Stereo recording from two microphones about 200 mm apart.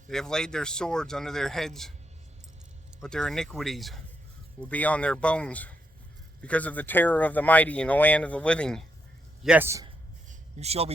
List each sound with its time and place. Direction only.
0.1 s speech: 5° left (ahead or behind)
3.0 s speech: 5° left (ahead or behind)
9.4 s a man's voice: 5° right (ahead or behind)
10.2 s a sound: 30° right (ahead or behind)